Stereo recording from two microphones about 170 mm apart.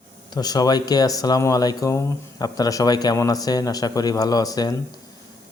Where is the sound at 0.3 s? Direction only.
25° left (ahead or behind).